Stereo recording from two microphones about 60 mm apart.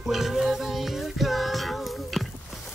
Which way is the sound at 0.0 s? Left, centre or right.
Centre.